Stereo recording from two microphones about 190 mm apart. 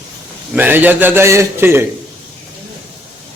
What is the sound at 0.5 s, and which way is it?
A man's voice, 10° right (ahead or behind).